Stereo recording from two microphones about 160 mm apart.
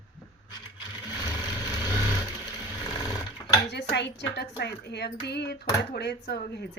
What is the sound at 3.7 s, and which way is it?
Speech, 90° left.